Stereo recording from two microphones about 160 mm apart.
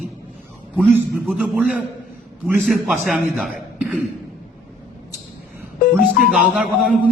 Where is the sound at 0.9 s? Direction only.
10° right (ahead or behind).